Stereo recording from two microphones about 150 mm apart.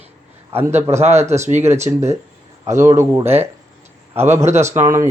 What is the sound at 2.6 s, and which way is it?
Speech, 20° right (ahead or behind).